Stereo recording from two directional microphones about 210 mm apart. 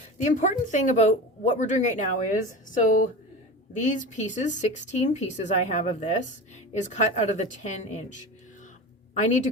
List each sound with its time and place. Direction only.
0.2 s a woman's voice: 35° left (ahead or behind)